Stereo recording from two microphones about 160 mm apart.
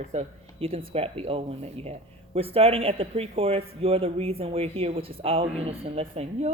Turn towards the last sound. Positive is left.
turn(degrees=-40)  # may be behind; listen again after turning